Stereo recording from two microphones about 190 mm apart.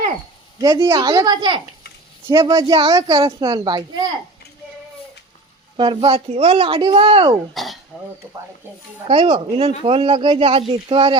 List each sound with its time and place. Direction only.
0.6 s speech: 20° right (ahead or behind)
5.7 s speech: 25° right (ahead or behind)
7.5 s a sound: centre (ahead or behind)
9.0 s speech: 30° right (ahead or behind)